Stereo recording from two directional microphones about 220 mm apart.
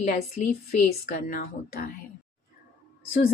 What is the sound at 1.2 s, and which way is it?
Speech, 40° left (ahead or behind).